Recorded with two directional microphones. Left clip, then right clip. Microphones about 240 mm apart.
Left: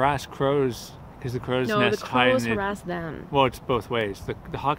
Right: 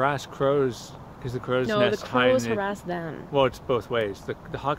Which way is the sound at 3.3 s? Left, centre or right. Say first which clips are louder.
Left 1 dB; left.